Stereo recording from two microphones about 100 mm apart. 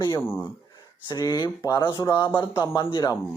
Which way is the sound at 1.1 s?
45° left (ahead or behind).